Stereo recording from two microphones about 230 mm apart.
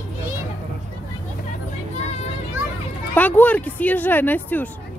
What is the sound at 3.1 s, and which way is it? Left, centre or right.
Speech, centre.